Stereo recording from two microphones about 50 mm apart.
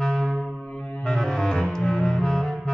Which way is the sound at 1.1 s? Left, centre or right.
Centre.